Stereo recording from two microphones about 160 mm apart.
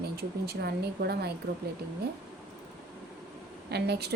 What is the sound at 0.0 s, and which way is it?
Speech, 80° right.